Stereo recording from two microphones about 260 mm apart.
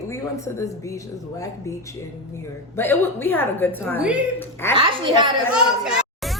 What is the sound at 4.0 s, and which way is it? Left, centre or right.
Speech, centre.